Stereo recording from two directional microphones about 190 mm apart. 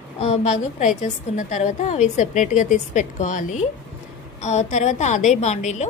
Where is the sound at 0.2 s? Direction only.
35° left (ahead or behind).